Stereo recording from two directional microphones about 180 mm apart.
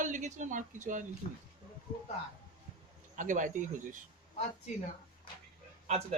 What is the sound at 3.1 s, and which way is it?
Speech, 45° right (ahead or behind).